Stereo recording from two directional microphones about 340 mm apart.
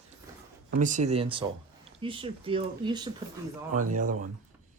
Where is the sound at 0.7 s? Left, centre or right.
Right.